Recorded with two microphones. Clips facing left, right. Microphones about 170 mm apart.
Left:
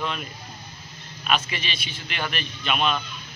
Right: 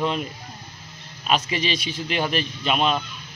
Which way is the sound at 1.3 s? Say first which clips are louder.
Right 4 dB; 35° right (ahead or behind).